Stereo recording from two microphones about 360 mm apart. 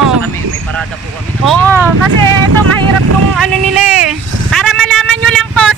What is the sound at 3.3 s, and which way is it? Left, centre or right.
Vehicle, centre.